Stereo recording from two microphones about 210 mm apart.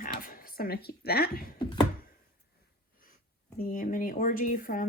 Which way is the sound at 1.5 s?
20° left (ahead or behind).